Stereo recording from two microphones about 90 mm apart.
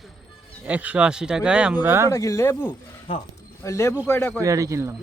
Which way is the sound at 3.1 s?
80° left.